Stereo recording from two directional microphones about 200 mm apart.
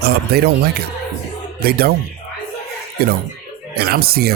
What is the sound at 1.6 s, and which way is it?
Speech, 50° right (ahead or behind).